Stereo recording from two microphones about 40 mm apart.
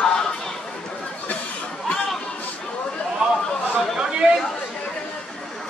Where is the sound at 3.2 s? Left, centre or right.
Right.